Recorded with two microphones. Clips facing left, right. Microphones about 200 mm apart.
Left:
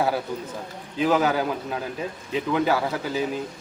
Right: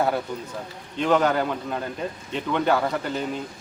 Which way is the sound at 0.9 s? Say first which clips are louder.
Even; 5° left (ahead or behind).